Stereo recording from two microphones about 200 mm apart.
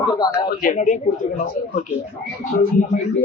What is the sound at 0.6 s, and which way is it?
Speech, 40° left (ahead or behind).